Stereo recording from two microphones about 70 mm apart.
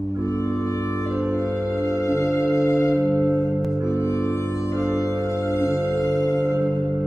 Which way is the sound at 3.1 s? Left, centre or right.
Right.